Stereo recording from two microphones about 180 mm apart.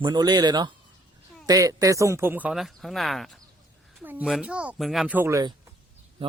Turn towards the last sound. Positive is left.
turn(degrees=-20)  # may be behind; listen again after turning